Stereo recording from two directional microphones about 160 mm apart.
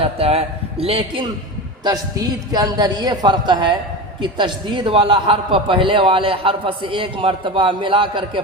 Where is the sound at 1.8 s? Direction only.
25° right (ahead or behind).